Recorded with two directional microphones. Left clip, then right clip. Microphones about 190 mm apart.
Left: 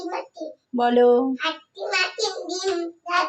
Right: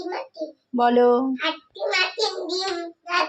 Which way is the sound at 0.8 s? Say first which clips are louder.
Even; centre (ahead or behind).